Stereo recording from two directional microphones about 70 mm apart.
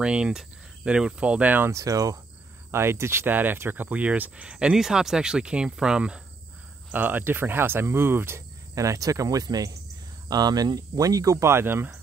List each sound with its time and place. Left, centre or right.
0.0 s speech: centre
1.7 s speech: right
2.7 s speech: right; by 6.2 s centre
6.9 s speech: right
8.7 s speech: right
11.4 s speech: right